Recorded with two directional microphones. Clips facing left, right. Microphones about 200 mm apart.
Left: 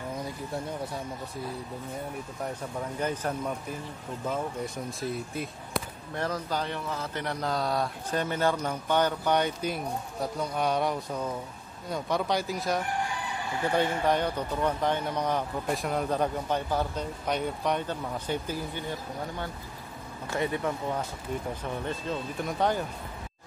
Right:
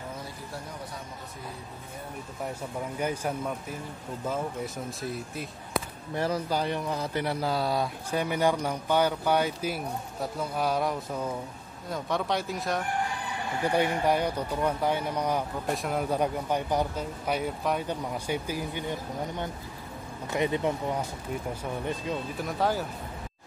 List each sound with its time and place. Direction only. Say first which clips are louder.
3.0 s speech: even; 10° right (ahead or behind)
5.0 s speech: left 4 dB; centre (ahead or behind)
13.7 s speech: right 1 dB; 10° right (ahead or behind)
22.4 s speech: left 1 dB; centre (ahead or behind)